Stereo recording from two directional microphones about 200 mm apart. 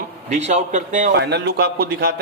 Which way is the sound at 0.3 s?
35° right (ahead or behind).